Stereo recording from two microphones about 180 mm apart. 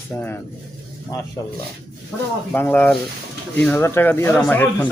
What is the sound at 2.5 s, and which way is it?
Speech, 10° left (ahead or behind).